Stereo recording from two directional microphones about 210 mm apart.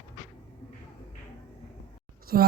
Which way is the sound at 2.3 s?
45° right (ahead or behind).